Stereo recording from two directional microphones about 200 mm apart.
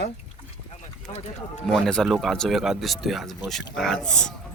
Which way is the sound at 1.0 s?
35° left (ahead or behind).